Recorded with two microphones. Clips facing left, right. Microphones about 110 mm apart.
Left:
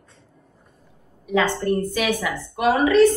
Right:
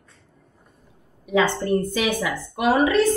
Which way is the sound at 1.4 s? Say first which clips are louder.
Even; 20° right (ahead or behind).